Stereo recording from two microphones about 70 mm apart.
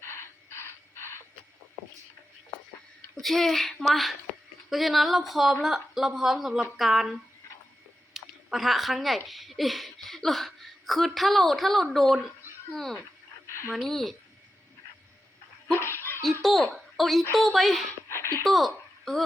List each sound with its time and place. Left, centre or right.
0.0 s crow: left
3.2 s speech: centre
13.5 s a sound: left
13.7 s speech: centre
15.8 s laughter: left
16.4 s a woman's voice: centre
18.1 s a sound: left
18.4 s speech: centre